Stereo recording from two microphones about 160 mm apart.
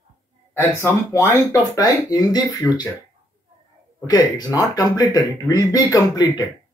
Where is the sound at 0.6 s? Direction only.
15° left (ahead or behind).